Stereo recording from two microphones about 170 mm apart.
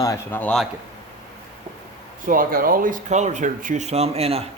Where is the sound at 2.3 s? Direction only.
55° right (ahead or behind).